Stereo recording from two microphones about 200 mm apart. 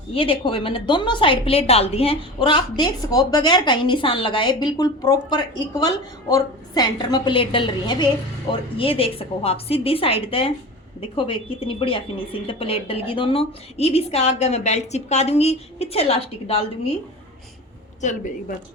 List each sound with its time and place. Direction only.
0.1 s a woman's voice: 25° left (ahead or behind)
18.0 s speech: 40° left (ahead or behind)